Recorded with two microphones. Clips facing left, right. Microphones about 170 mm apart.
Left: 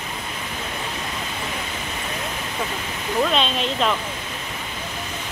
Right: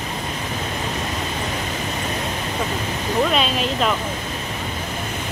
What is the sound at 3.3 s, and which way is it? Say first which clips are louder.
Speech: right 2 dB; 5° right (ahead or behind).